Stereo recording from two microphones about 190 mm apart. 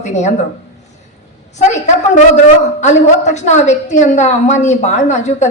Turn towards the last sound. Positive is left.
turn(degrees=40)  # may be behind; listen again after turning